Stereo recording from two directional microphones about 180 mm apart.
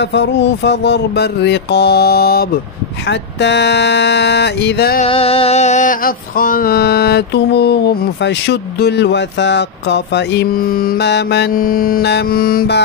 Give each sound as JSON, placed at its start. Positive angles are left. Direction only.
{"t": 0.0, "sound": "mantra", "side_deg": 75}
{"t": 3.1, "sound": "mantra", "side_deg": 75}
{"t": 5.0, "sound": "a sound", "side_deg": 35}